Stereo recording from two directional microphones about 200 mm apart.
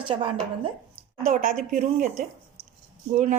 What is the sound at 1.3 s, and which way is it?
Speech, 45° right (ahead or behind).